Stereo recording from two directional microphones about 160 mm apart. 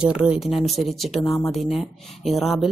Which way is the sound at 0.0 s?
5° right (ahead or behind).